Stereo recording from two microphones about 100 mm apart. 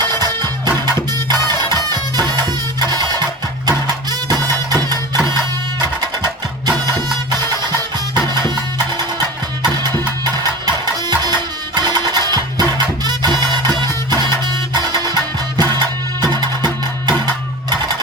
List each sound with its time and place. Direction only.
0.0 s music: 40° right (ahead or behind)
6.7 s music: 45° right (ahead or behind)